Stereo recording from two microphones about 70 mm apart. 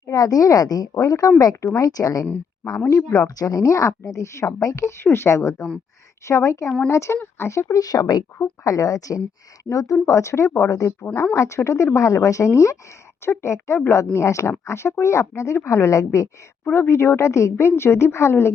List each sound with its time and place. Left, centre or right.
0.0 s a woman's voice: left
7.8 s speech: left
8.4 s a woman's voice: left
16.7 s a woman's voice: left